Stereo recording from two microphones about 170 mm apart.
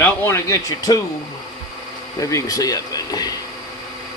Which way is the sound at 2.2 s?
20° left (ahead or behind).